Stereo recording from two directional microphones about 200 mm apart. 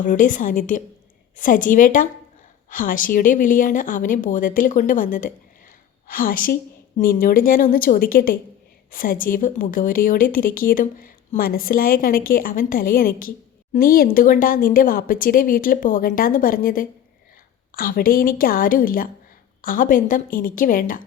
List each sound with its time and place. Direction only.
0.0 s a woman's voice: 40° left (ahead or behind)